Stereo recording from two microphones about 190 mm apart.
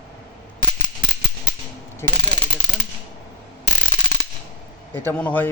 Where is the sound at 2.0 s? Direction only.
15° left (ahead or behind).